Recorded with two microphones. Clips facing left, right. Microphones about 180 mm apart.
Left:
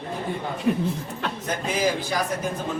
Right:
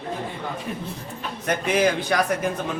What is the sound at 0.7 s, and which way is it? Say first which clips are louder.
Speech: left 14 dB; 50° left (ahead or behind).